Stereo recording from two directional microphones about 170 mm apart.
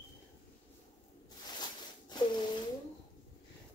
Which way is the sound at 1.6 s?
25° left (ahead or behind).